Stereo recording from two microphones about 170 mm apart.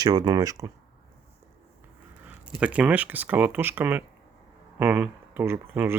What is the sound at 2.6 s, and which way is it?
Speech, 5° right (ahead or behind).